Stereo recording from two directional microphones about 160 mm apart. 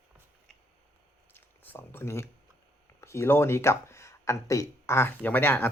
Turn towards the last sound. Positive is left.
turn(degrees=10)  # may be behind; listen again after turning